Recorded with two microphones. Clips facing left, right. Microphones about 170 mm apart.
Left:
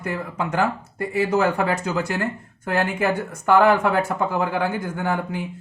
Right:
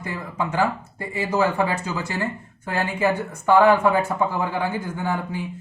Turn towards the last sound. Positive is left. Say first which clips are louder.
# left 1 dB
turn(degrees=65)  # may be behind; listen again after turning